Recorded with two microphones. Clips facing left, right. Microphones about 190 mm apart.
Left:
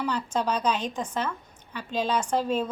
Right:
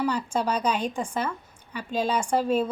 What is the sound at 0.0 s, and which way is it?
A woman's voice, 10° right (ahead or behind).